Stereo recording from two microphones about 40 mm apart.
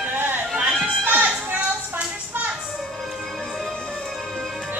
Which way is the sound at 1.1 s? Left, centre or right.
Right.